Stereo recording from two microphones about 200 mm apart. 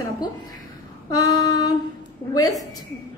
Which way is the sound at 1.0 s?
20° left (ahead or behind).